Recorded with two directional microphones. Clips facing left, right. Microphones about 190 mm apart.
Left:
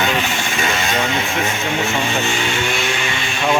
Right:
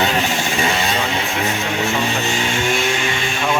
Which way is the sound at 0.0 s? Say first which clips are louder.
Right 1 dB; 35° right (ahead or behind).